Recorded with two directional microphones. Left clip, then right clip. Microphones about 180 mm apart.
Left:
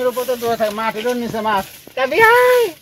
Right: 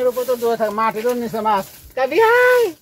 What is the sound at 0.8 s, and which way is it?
Speech, 50° right (ahead or behind).